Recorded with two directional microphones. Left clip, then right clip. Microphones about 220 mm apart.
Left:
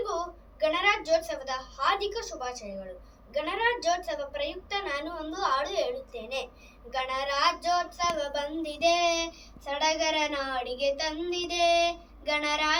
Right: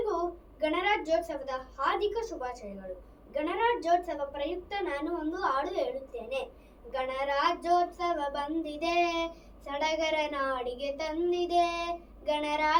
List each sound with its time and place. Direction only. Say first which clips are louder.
0.6 s a woman's voice: left 3 dB; centre (ahead or behind)